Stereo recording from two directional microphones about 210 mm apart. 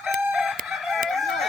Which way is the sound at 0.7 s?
Centre (ahead or behind).